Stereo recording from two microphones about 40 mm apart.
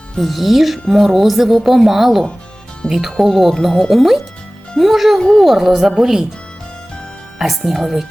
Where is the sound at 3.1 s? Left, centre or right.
Centre.